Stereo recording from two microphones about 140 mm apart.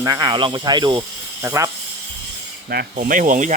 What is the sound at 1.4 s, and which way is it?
Speech, 20° right (ahead or behind).